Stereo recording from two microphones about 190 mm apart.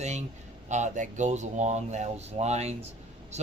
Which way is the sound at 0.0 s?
35° right (ahead or behind).